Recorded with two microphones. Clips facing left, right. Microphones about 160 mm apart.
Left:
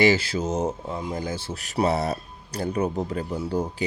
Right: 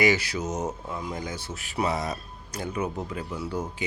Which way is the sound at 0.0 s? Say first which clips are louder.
Left 4 dB; 30° left (ahead or behind).